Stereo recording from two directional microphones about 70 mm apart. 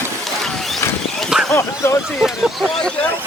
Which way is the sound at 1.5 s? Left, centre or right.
Left.